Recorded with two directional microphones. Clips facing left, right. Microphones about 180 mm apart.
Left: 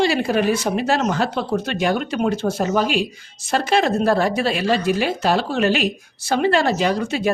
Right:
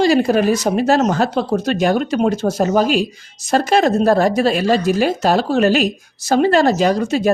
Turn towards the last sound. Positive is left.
turn(degrees=-40)  # may be behind; listen again after turning